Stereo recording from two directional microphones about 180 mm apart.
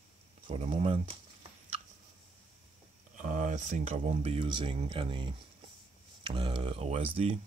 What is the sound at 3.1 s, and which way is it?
Speech, 45° right (ahead or behind).